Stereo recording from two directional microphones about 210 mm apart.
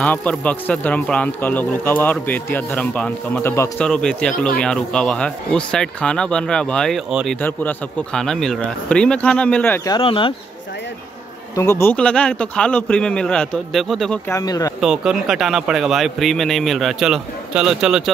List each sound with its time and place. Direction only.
0.0 s a man's voice: 5° left (ahead or behind)
9.9 s speech: 25° left (ahead or behind)
11.5 s a man's voice: 15° left (ahead or behind)
14.3 s speech: 15° left (ahead or behind)
14.8 s a man's voice: centre (ahead or behind)